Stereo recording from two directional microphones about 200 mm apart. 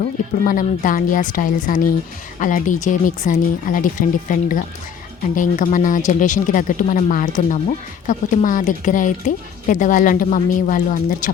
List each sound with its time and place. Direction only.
0.0 s a woman's voice: 40° left (ahead or behind)